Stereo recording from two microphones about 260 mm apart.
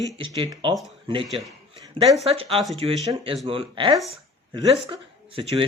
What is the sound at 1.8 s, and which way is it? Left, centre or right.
A woman's voice, centre.